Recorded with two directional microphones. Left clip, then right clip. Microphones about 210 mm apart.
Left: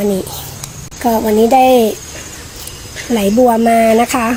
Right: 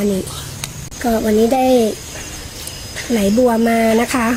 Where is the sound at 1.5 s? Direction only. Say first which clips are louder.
Left 8 dB; 10° left (ahead or behind).